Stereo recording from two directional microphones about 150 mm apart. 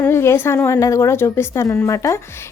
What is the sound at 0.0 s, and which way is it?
A woman's voice, 15° left (ahead or behind).